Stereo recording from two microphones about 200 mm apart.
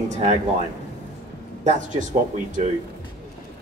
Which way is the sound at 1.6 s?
40° right (ahead or behind).